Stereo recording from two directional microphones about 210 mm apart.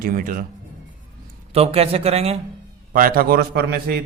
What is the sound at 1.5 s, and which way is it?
Speech, 30° right (ahead or behind).